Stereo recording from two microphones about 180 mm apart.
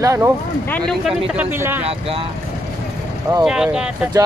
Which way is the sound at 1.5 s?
10° right (ahead or behind).